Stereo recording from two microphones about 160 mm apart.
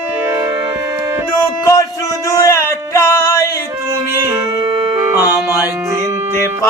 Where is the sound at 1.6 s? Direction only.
20° left (ahead or behind).